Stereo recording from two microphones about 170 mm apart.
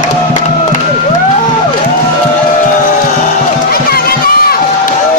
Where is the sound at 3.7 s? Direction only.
65° left (ahead or behind).